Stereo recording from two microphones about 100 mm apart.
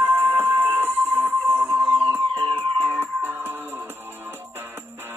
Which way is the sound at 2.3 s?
55° right (ahead or behind).